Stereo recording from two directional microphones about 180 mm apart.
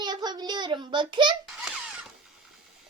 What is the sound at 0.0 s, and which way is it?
A child's voice, 25° right (ahead or behind).